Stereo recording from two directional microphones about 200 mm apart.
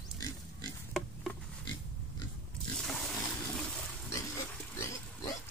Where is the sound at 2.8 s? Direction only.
Centre (ahead or behind).